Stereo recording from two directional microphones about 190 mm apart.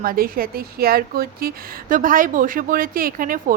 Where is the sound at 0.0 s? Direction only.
50° right (ahead or behind).